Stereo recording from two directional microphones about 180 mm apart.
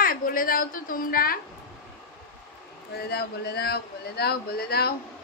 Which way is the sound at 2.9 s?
60° left (ahead or behind).